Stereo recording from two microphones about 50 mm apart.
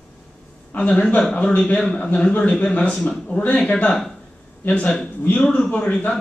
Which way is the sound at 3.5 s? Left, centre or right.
Centre.